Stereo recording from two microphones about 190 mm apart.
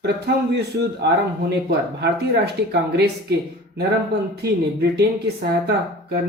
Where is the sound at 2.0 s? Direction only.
60° right (ahead or behind).